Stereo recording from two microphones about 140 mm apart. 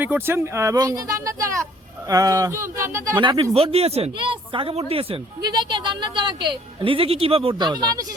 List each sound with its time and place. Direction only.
0.0 s speech: 15° right (ahead or behind)
3.2 s speech: 35° right (ahead or behind)